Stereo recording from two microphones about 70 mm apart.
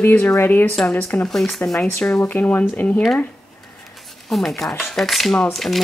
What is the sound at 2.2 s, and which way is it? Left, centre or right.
Speech, left.